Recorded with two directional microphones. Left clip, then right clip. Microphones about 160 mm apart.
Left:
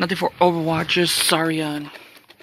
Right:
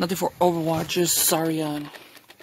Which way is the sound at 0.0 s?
10° right (ahead or behind).